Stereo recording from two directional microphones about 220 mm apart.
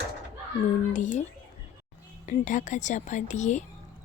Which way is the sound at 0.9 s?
35° left (ahead or behind).